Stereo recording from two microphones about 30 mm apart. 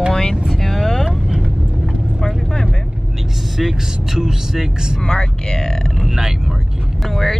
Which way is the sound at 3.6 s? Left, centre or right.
Centre.